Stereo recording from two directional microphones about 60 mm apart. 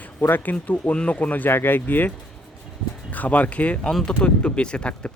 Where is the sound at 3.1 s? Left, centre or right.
Left.